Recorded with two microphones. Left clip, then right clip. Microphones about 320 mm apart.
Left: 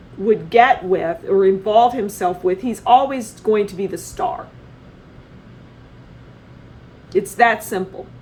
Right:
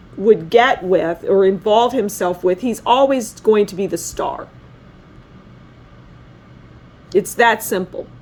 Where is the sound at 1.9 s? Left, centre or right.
Right.